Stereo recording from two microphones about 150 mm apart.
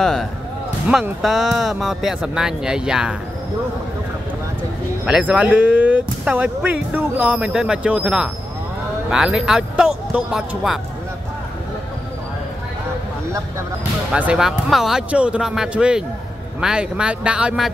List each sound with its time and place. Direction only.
0.0 s speech: 5° left (ahead or behind)
5.0 s speech: 5° right (ahead or behind)
14.1 s speech: 5° right (ahead or behind)